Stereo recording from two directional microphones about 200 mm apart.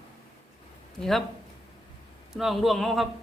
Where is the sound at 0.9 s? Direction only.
Centre (ahead or behind).